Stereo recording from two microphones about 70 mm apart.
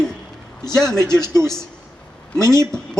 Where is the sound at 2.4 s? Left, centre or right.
Left.